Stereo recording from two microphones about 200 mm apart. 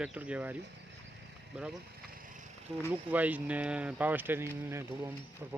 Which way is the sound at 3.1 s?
10° right (ahead or behind).